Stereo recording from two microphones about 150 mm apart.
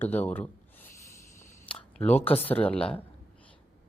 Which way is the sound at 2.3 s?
10° left (ahead or behind).